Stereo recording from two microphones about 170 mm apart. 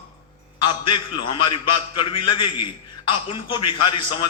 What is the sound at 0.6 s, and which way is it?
A man's voice, 30° left (ahead or behind).